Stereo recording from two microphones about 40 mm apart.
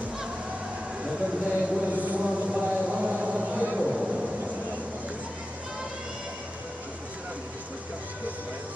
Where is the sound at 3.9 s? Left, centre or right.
Centre.